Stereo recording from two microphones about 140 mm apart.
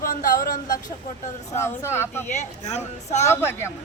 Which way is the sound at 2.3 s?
55° left (ahead or behind).